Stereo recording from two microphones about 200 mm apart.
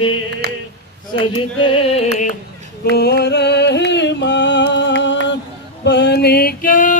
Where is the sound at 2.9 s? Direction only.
55° left (ahead or behind).